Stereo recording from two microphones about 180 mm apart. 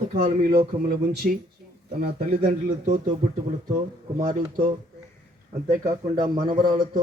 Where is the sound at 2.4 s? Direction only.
45° right (ahead or behind).